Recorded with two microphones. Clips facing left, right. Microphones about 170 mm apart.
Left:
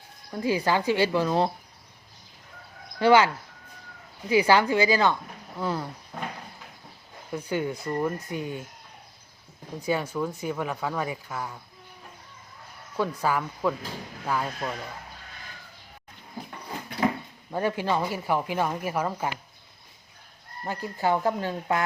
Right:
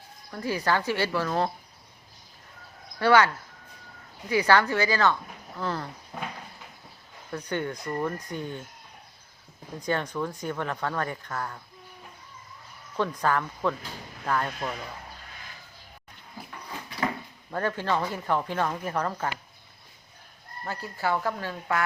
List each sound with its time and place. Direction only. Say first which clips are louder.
0.3 s a woman's voice: left 2 dB; 15° left (ahead or behind)
3.0 s a woman's voice: left 2 dB; 15° left (ahead or behind)
4.3 s a woman's voice: left 2 dB; 10° left (ahead or behind)
7.3 s a woman's voice: left 2 dB; 10° left (ahead or behind)
9.8 s a woman's voice: left 2 dB; 5° left (ahead or behind)
13.0 s a woman's voice: even; 10° left (ahead or behind)
17.5 s a woman's voice: left 2 dB; 15° left (ahead or behind)
20.7 s speech: left 3 dB; 15° left (ahead or behind)